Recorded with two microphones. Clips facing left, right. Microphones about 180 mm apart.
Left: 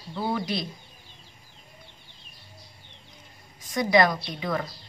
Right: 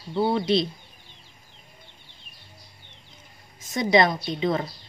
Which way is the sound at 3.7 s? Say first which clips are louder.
Right 1 dB; 25° right (ahead or behind).